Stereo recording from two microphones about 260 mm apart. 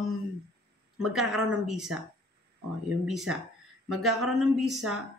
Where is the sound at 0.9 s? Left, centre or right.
Centre.